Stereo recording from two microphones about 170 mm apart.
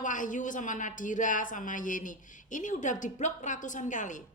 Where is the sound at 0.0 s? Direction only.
50° left (ahead or behind).